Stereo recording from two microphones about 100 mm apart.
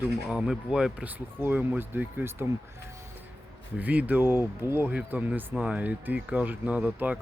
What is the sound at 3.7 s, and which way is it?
Speech, 15° right (ahead or behind).